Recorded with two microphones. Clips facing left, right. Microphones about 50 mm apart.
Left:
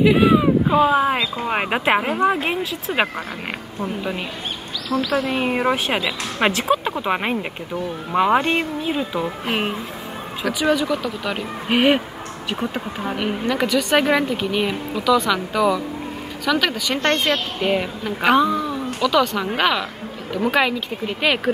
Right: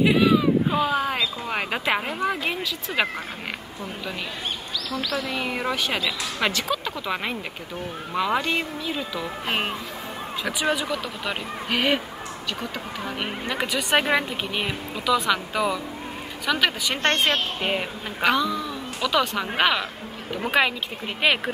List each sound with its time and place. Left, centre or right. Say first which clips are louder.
0.2 s speech: left 4 dB; left
2.0 s speech: left 6 dB; left
3.8 s speech: left 8 dB; left
4.9 s speech: left 8 dB; left
10.6 s speech: left 6 dB; centre
10.9 s speech: left 5 dB; centre
11.7 s speech: left 6 dB; left
13.2 s speech: left 7 dB; centre
13.7 s speech: left 6 dB; right
13.9 s speech: left 2 dB; centre
17.0 s a woman's voice: left 1 dB; right
17.6 s speech: left 5 dB; centre
18.3 s a sound: left 7 dB; left
19.0 s speech: left 4 dB; centre